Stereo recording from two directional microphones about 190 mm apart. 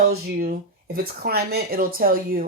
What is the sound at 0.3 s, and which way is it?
Speech, 50° right (ahead or behind).